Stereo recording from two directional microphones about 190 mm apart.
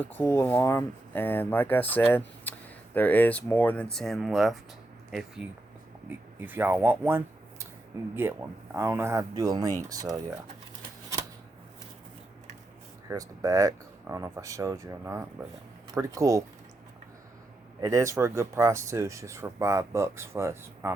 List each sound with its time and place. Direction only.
0.0 s speech: 10° left (ahead or behind); by 10.2 s 20° right (ahead or behind)
13.1 s speech: 15° right (ahead or behind)
17.7 s speech: 15° right (ahead or behind)